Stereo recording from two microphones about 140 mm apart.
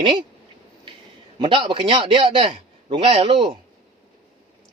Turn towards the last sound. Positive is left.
turn(degrees=-40)  # may be behind; listen again after turning